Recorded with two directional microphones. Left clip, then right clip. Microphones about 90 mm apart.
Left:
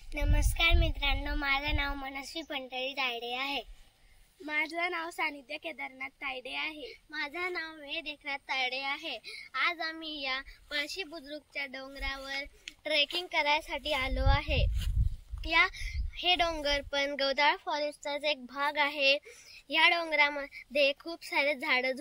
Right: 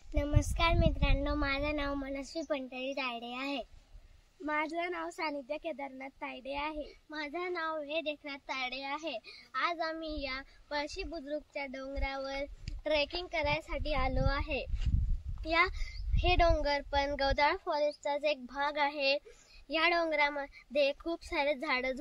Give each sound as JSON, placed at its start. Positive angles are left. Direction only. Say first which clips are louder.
{"t": 0.1, "sound": "child singing", "louder": "right 2 dB", "side_deg": -35}
{"t": 4.5, "sound": "speech", "louder": "left 2 dB", "side_deg": -35}